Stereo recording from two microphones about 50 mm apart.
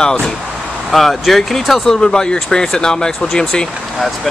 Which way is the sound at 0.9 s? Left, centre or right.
Centre.